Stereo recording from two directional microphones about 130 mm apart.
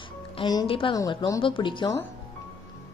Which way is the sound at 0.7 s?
40° left (ahead or behind).